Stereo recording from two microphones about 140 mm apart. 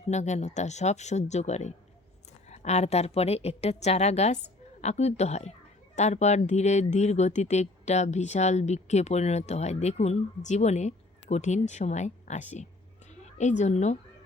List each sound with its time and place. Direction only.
0.1 s a woman's voice: 55° left (ahead or behind)